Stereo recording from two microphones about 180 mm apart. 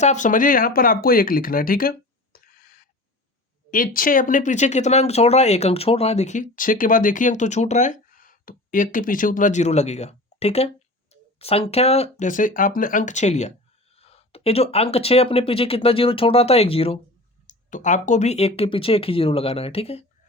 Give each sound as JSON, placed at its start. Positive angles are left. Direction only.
{"t": 0.0, "sound": "speech", "side_deg": 40}
{"t": 17.4, "sound": "speech", "side_deg": 45}